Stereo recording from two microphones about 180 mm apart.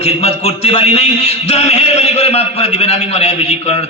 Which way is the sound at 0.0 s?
35° left (ahead or behind).